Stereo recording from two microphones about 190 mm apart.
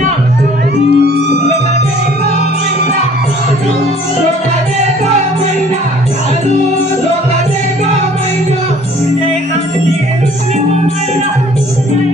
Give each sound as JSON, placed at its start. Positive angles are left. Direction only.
{"t": 0.9, "sound": "music", "side_deg": -60}